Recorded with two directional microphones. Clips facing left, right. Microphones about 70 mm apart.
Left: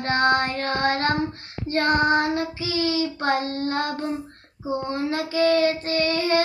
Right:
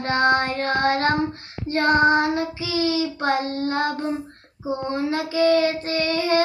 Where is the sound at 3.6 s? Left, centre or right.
Right.